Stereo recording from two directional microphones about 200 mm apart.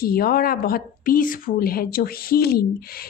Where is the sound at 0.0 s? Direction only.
50° left (ahead or behind).